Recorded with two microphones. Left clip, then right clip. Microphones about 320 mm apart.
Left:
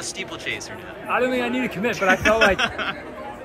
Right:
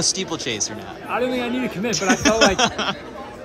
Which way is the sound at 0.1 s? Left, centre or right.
Centre.